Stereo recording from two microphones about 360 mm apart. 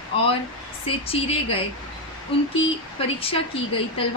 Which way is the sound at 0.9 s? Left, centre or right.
Centre.